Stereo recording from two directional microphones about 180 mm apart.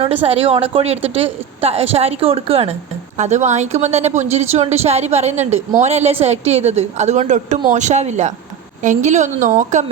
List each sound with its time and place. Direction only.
0.0 s a woman's voice: 30° right (ahead or behind)